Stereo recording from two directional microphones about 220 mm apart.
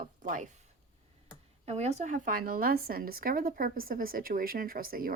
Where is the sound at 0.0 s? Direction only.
35° right (ahead or behind).